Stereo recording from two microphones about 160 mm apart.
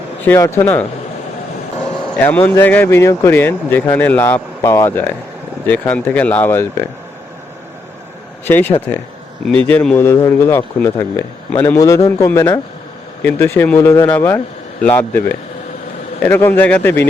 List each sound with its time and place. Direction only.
0.2 s speech: 15° left (ahead or behind)
1.8 s vehicle: 5° left (ahead or behind)
2.6 s speech: 10° left (ahead or behind)
8.4 s speech: 15° left (ahead or behind)